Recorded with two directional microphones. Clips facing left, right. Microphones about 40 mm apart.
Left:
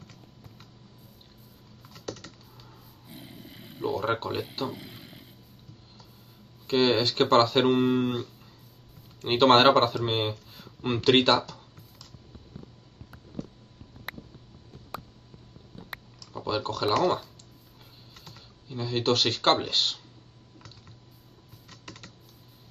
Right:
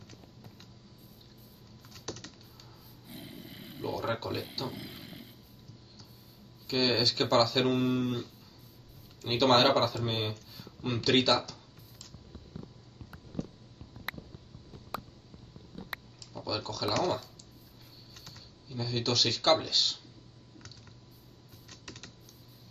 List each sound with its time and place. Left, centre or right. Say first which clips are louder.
1.8 s typing: left 4 dB; centre
3.1 s a sound: even; centre
3.9 s speech: left 4 dB; left
4.6 s a sound: left 3 dB; centre
6.7 s speech: left 5 dB; left
12.6 s a sound: even; left
13.1 s a sound: even; centre
16.3 s typing: left 6 dB; left
17.0 s speech: left 5 dB; left
18.1 s computer keyboard: left 2 dB; left
18.7 s speech: left 6 dB; left
21.6 s typing: left 2 dB; centre